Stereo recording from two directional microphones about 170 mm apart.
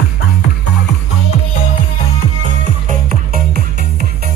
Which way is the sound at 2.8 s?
60° right (ahead or behind).